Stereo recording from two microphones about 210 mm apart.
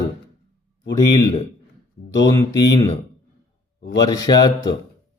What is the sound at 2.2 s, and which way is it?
Mantra, 20° left (ahead or behind).